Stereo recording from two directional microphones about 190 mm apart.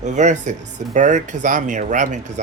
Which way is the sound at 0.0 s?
40° right (ahead or behind).